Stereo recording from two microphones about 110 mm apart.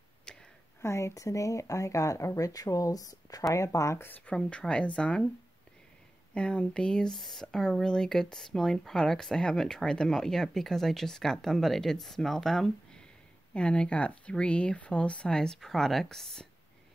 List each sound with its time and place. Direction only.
0.7 s speech: 25° left (ahead or behind); by 5.3 s 10° left (ahead or behind)
6.3 s speech: 10° left (ahead or behind)